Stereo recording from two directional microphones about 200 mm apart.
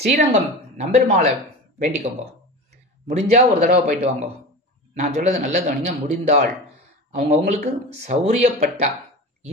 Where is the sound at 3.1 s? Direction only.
35° right (ahead or behind).